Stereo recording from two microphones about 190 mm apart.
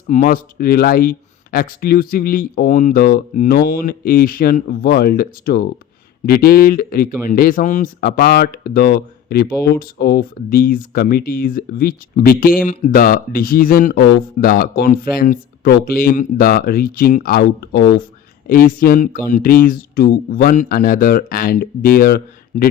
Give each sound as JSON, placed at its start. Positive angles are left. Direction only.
{"t": 0.1, "sound": "speech", "side_deg": 45}